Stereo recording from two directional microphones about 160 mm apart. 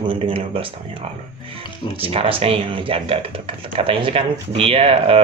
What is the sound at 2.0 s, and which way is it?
Speech, 35° right (ahead or behind).